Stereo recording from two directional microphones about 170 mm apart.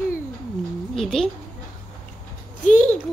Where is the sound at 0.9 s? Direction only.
5° left (ahead or behind).